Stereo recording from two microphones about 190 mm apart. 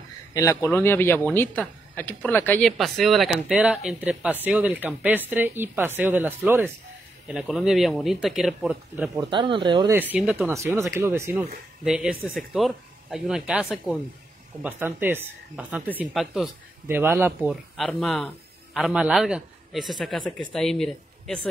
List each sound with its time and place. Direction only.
0.3 s speech: 15° left (ahead or behind); by 9.1 s 5° right (ahead or behind)
9.1 s speech: 20° right (ahead or behind)
10.1 s speech: 10° right (ahead or behind)